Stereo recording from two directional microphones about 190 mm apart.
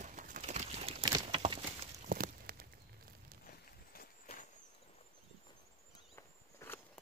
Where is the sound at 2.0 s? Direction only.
50° right (ahead or behind).